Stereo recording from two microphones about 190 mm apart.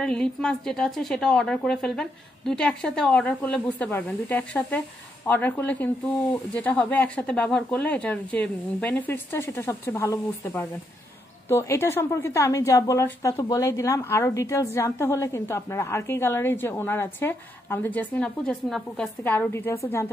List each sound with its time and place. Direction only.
0.0 s a woman's voice: 5° left (ahead or behind)